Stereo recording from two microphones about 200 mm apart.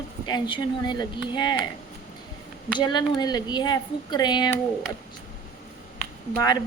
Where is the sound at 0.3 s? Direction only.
20° left (ahead or behind).